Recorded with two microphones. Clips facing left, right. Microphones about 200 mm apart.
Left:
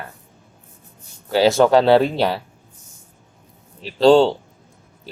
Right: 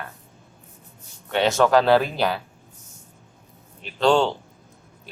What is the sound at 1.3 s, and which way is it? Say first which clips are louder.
Speech: left 4 dB; 30° left (ahead or behind).